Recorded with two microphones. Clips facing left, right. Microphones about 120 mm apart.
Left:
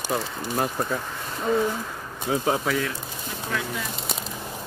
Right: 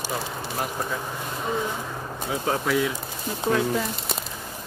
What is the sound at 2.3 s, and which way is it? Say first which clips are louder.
Speech: left 5 dB; 35° left (ahead or behind).